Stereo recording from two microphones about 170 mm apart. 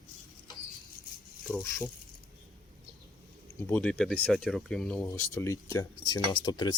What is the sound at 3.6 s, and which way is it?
Speech, 10° left (ahead or behind).